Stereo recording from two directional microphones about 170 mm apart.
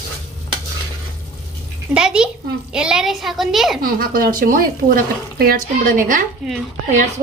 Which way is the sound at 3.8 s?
60° right (ahead or behind).